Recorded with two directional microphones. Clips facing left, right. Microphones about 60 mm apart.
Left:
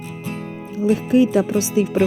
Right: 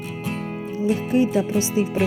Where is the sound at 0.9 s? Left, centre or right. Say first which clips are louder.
Left 4 dB; left.